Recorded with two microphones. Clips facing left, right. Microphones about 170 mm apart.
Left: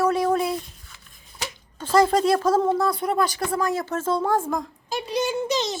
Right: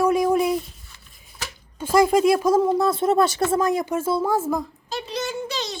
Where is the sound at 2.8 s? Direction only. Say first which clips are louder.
Right 4 dB; 25° right (ahead or behind); by 4.6 s 5° right (ahead or behind).